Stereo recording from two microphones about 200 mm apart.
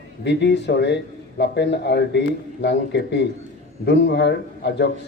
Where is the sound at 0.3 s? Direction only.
60° left (ahead or behind).